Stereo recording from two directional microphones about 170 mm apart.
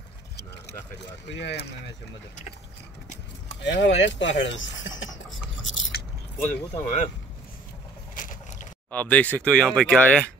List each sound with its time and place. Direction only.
1.3 s speech: 85° left
3.6 s speech: 90° left
5.6 s biting: 80° left
6.4 s speech: 45° left (ahead or behind)
8.9 s speech: 10° left (ahead or behind)